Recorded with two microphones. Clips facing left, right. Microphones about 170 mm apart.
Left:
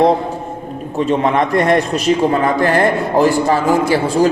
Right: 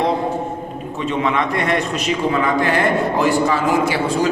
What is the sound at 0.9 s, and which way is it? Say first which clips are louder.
A man's voice: left 5 dB; 40° left (ahead or behind).